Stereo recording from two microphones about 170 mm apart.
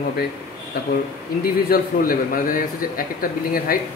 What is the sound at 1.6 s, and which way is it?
Speech, 60° left (ahead or behind).